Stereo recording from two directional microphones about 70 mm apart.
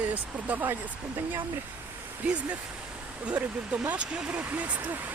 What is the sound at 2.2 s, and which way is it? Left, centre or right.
Speech, centre.